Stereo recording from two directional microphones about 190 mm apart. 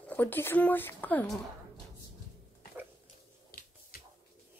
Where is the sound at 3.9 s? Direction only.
50° left (ahead or behind).